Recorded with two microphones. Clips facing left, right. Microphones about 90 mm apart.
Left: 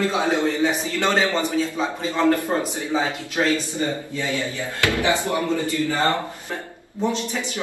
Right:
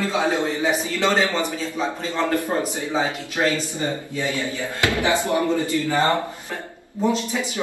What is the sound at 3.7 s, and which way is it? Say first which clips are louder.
A man's voice: left 1 dB; 20° right (ahead or behind).